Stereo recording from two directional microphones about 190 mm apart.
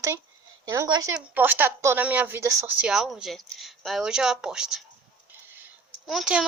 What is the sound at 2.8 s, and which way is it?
Speech, centre (ahead or behind).